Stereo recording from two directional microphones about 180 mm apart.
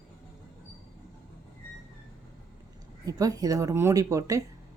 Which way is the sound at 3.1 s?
20° right (ahead or behind).